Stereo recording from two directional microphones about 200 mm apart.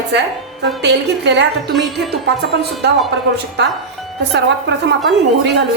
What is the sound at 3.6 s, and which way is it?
Speech, 60° right (ahead or behind).